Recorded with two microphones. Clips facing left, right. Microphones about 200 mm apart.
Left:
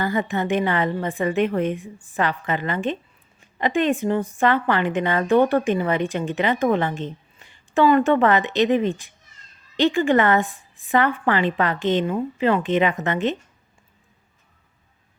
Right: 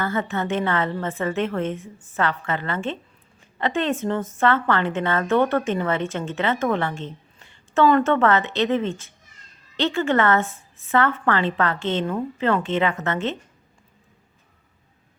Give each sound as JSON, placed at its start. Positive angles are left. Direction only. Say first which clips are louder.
{"t": 0.0, "sound": "a woman's voice", "louder": "left 2 dB", "side_deg": 15}